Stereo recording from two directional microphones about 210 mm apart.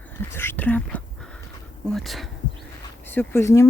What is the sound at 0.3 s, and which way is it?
Speech, 10° left (ahead or behind).